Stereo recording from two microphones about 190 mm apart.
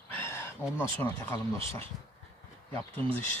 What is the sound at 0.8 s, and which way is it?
Speech, 10° left (ahead or behind).